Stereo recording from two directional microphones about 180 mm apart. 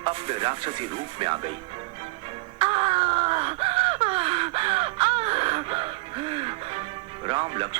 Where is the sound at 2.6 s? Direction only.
30° right (ahead or behind).